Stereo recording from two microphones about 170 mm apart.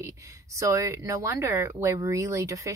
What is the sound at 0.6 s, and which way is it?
Speech, 20° right (ahead or behind).